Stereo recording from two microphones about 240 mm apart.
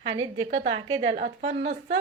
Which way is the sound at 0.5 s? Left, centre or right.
Right.